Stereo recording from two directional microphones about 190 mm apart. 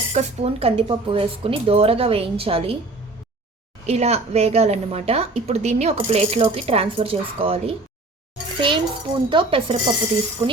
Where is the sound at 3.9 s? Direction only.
35° right (ahead or behind).